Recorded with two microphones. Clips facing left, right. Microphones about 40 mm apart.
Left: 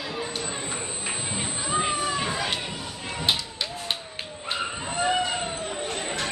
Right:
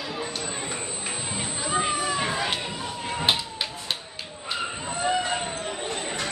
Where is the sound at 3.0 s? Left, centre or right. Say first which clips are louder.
Right 2 dB; right.